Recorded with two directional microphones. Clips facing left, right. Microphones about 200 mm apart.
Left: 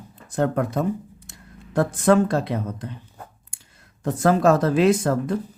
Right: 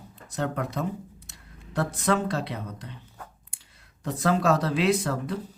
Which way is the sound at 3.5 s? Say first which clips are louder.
Left 4 dB; 45° left (ahead or behind).